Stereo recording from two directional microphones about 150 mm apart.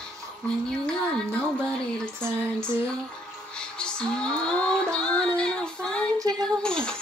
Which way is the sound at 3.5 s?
5° left (ahead or behind).